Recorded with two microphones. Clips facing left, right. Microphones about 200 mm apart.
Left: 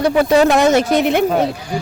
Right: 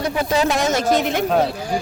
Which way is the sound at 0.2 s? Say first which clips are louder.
Left 7 dB; 60° left (ahead or behind).